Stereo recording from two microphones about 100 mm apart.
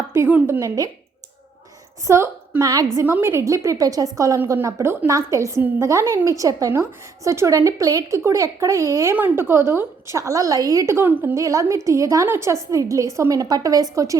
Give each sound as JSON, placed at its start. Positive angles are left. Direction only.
{"t": 0.3, "sound": "a woman's voice", "side_deg": -15}
{"t": 2.0, "sound": "a woman's voice", "side_deg": -25}
{"t": 3.0, "sound": "a woman's voice", "side_deg": -25}
{"t": 9.1, "sound": "a woman's voice", "side_deg": -20}
{"t": 11.3, "sound": "a woman's voice", "side_deg": -35}